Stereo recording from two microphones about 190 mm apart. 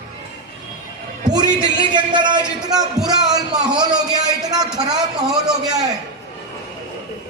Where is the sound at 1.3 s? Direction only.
25° right (ahead or behind).